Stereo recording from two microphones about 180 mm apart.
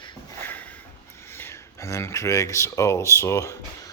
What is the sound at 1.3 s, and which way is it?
A man's voice, 15° left (ahead or behind).